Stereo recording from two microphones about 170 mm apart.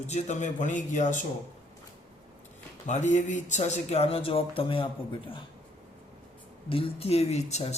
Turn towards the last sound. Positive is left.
turn(degrees=40)  # may be behind; listen again after turning